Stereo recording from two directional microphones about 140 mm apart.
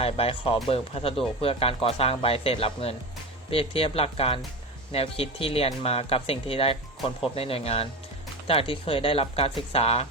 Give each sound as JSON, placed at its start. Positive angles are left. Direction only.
{"t": 0.0, "sound": "speech", "side_deg": 45}